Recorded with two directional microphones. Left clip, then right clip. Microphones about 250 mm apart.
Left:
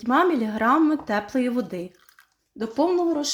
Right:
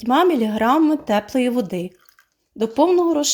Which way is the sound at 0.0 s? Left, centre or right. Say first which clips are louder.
Right 4 dB; centre.